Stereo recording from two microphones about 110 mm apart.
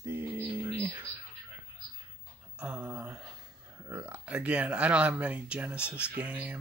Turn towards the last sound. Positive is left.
turn(degrees=-15)  # may be behind; listen again after turning